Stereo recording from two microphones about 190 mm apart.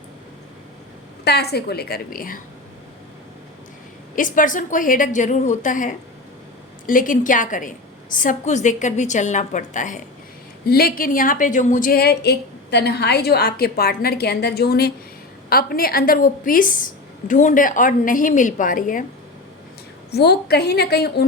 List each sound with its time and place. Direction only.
1.2 s a woman's voice: 60° left (ahead or behind)
4.1 s a woman's voice: 45° left (ahead or behind)
10.7 s a woman's voice: 50° left (ahead or behind)
20.1 s a woman's voice: 60° left (ahead or behind)